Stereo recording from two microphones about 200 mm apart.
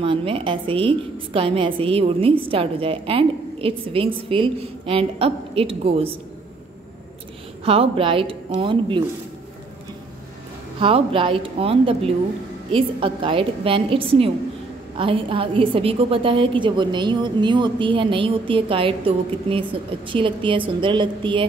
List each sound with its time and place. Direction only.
0.0 s a woman's voice: 25° right (ahead or behind)
7.6 s a woman's voice: 30° right (ahead or behind)
10.8 s a woman's voice: 25° right (ahead or behind)